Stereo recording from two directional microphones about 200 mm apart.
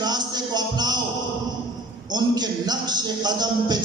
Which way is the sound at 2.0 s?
20° right (ahead or behind).